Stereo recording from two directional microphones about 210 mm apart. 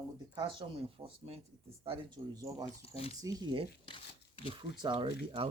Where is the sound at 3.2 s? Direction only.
20° right (ahead or behind).